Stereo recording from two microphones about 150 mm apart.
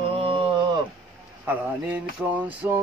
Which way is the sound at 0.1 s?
40° right (ahead or behind).